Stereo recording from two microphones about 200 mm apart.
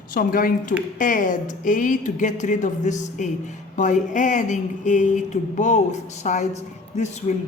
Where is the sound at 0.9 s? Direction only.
40° left (ahead or behind).